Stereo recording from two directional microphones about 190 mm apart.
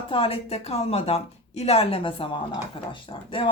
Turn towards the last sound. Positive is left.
turn(degrees=25)  # may be behind; listen again after turning